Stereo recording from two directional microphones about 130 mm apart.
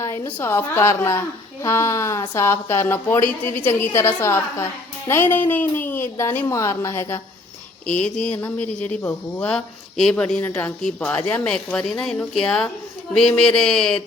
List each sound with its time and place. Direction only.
0.0 s speech: 15° left (ahead or behind)
7.9 s speech: 10° left (ahead or behind)